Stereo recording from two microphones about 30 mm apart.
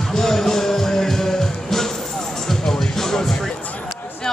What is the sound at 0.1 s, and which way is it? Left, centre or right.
Music, centre.